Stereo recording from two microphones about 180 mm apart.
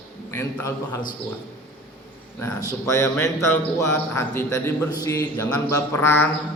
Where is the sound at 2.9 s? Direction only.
15° left (ahead or behind).